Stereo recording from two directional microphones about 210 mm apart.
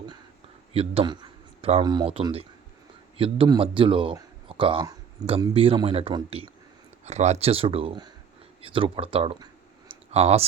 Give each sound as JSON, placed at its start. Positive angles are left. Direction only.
{"t": 0.7, "sound": "a man's voice", "side_deg": -30}
{"t": 9.9, "sound": "clicking", "side_deg": -30}